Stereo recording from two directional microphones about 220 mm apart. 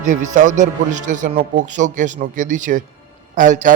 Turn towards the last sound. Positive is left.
turn(degrees=-35)  # may be behind; listen again after turning